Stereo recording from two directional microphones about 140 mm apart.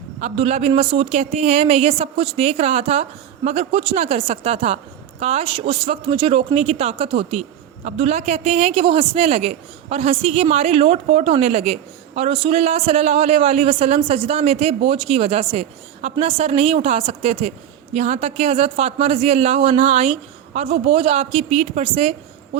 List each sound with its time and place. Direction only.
0.2 s speech: 55° right (ahead or behind)
0.7 s speech: 40° right (ahead or behind)